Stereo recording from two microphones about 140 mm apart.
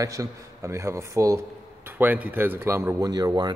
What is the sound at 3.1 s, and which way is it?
Speech, 30° right (ahead or behind).